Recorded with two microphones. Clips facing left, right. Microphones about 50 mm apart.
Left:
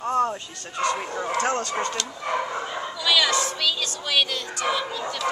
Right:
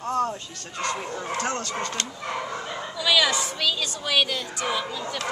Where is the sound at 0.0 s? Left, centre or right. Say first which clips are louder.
Left 2 dB; centre.